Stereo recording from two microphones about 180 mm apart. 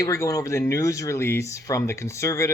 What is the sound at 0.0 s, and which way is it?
Speech, 15° left (ahead or behind).